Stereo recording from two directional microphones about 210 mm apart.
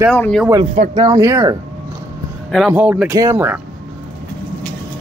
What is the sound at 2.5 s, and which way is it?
Speech, 5° right (ahead or behind).